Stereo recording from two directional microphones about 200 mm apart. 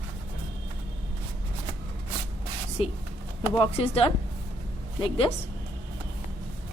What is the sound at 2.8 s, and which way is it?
A woman's voice, 30° left (ahead or behind).